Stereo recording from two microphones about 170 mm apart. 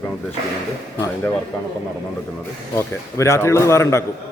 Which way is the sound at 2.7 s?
15° left (ahead or behind).